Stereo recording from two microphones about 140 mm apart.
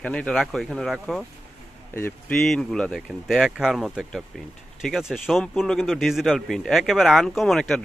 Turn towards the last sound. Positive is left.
turn(degrees=5)  # may be behind; listen again after turning